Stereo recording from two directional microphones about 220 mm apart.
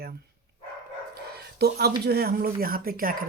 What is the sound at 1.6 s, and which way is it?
Speech, 45° right (ahead or behind).